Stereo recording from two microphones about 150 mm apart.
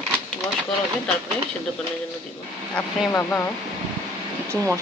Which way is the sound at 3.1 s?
15° left (ahead or behind).